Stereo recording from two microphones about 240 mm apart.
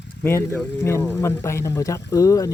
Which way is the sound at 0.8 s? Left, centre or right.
Centre.